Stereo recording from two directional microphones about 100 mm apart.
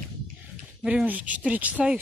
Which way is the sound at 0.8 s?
15° right (ahead or behind).